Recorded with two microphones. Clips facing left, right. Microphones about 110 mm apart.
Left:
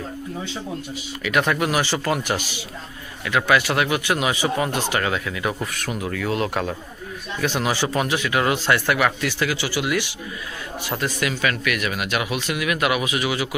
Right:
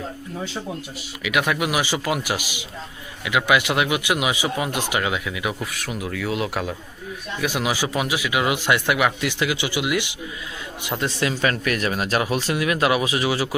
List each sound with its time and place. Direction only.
1.2 s speech: 5° right (ahead or behind); by 13.6 s 30° right (ahead or behind)